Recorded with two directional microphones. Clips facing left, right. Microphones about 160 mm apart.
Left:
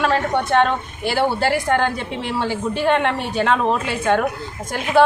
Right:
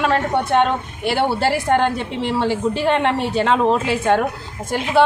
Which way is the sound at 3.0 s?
30° right (ahead or behind).